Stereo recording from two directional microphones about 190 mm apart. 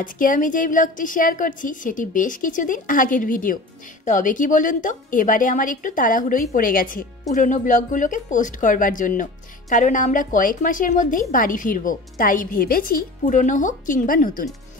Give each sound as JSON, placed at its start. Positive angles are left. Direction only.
{"t": 0.0, "sound": "speech", "side_deg": 45}